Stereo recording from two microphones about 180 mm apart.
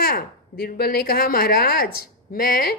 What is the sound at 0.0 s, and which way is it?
A woman's voice, 60° left (ahead or behind).